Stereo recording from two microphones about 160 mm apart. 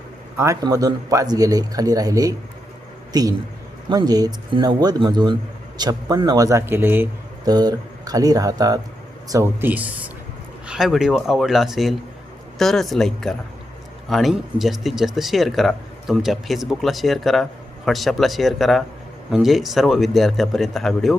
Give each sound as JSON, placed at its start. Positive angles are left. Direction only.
{"t": 0.3, "sound": "a man's voice", "side_deg": -20}
{"t": 7.4, "sound": "speech", "side_deg": -25}